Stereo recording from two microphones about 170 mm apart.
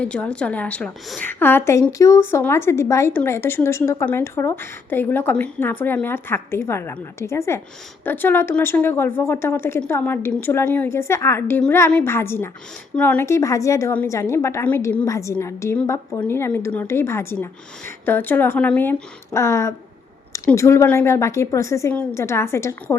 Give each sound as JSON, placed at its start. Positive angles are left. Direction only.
{"t": 0.0, "sound": "a woman's voice", "side_deg": 5}